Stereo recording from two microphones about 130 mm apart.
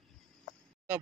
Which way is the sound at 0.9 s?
15° right (ahead or behind).